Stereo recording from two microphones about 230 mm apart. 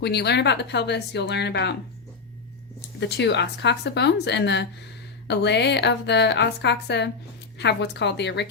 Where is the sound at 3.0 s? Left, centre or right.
Left.